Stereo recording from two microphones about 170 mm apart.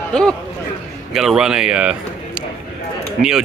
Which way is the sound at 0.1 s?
5° left (ahead or behind).